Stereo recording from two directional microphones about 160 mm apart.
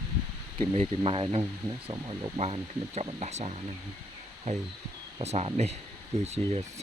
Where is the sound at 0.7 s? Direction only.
40° right (ahead or behind).